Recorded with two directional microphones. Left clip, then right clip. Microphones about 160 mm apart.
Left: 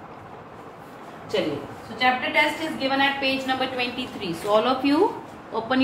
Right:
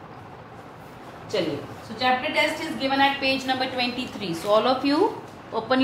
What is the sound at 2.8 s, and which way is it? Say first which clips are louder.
A woman's voice: right 1 dB; 20° right (ahead or behind).